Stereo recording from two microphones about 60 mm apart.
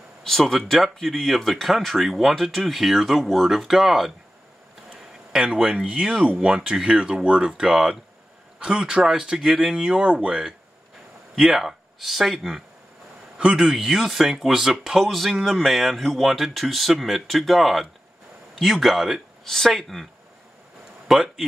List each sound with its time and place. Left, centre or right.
0.2 s speech: centre
5.3 s speech: centre
11.3 s speech: centre
19.4 s speech: centre
21.1 s speech: centre